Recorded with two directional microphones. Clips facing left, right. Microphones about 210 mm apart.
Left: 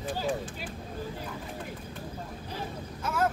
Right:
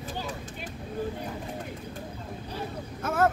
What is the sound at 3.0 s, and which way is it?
Speech, 55° right (ahead or behind).